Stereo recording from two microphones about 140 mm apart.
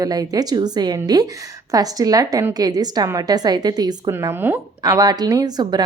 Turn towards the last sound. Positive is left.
turn(degrees=-30)  # may be behind; listen again after turning